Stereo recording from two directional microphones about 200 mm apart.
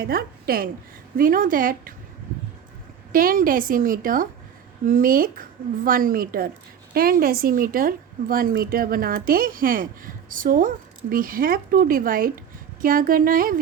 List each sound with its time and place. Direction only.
0.0 s a woman's voice: 50° right (ahead or behind)
3.1 s a woman's voice: 45° right (ahead or behind)